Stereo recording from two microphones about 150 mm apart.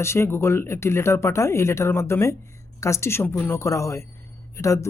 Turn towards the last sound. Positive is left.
turn(degrees=20)  # may be behind; listen again after turning